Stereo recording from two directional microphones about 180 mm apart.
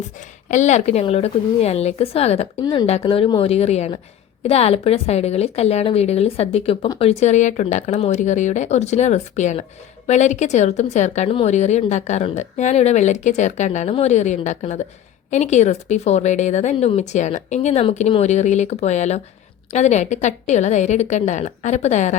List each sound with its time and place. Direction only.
0.4 s a woman's voice: 40° left (ahead or behind)